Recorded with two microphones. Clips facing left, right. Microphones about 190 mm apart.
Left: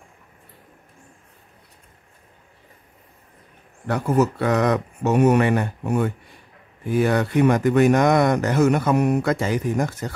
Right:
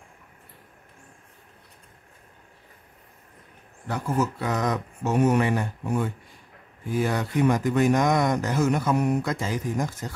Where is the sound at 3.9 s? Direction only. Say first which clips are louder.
Left 6 dB; 65° left (ahead or behind).